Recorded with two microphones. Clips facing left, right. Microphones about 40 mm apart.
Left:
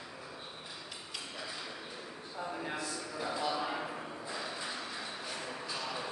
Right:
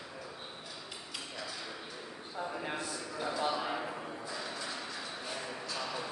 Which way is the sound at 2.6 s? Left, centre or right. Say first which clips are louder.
Right 1 dB; right.